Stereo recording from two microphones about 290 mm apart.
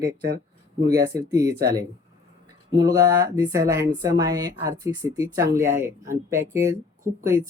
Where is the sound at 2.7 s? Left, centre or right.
Centre.